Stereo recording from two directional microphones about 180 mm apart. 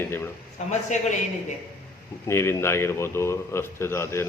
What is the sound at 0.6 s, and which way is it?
Speech, 40° left (ahead or behind).